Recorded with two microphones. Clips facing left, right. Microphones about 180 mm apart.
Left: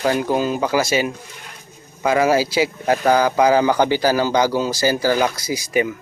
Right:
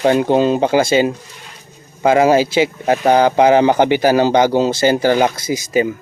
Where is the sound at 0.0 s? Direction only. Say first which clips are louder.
Right 6 dB; 25° right (ahead or behind).